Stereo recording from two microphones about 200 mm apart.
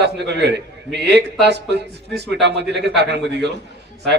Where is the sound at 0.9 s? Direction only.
60° right (ahead or behind).